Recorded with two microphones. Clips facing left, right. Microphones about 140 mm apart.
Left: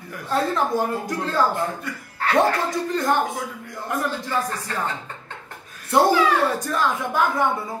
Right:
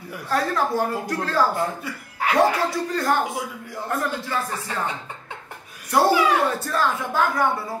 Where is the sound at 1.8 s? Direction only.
5° right (ahead or behind).